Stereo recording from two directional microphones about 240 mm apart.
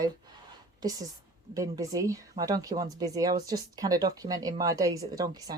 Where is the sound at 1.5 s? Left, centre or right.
Centre.